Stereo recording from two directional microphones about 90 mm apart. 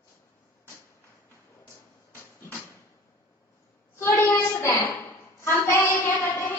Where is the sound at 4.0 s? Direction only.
25° left (ahead or behind).